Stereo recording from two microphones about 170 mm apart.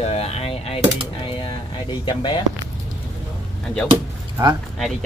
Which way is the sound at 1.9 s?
25° left (ahead or behind).